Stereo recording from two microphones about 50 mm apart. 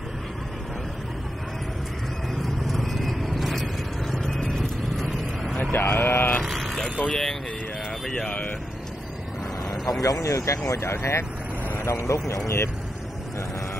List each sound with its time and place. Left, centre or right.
2.4 s vehicle: centre
5.6 s vehicle: left
6.4 s vehicle: centre
7.1 s speech: centre
8.3 s speech: left
9.7 s speech: left